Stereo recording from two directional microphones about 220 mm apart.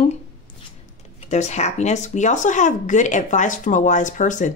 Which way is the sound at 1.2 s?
30° left (ahead or behind).